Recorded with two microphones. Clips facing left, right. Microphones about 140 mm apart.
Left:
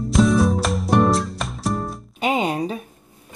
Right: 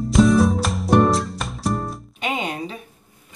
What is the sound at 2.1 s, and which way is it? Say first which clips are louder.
Music: left 6 dB; 40° left (ahead or behind).